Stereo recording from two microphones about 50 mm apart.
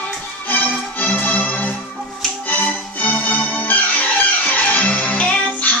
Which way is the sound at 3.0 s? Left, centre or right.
Left.